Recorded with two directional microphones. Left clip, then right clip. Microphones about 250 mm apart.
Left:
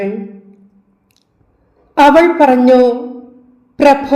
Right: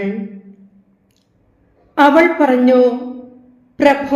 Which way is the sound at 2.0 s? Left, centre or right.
Left.